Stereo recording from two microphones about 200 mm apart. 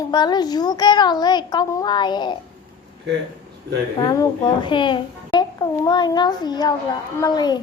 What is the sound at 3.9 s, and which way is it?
A woman's voice, 20° left (ahead or behind).